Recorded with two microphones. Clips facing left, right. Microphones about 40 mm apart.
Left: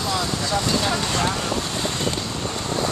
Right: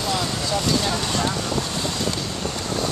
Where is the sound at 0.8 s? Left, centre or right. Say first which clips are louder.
Left 1 dB; centre.